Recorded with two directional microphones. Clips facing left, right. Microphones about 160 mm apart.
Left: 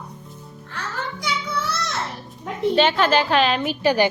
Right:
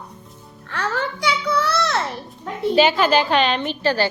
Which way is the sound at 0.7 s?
70° right (ahead or behind).